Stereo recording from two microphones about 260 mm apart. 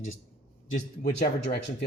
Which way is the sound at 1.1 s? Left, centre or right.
Left.